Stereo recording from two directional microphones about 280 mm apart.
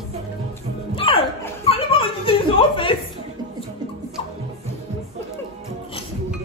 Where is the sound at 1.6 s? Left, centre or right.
Centre.